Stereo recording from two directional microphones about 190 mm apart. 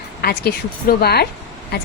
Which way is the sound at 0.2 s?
55° left (ahead or behind).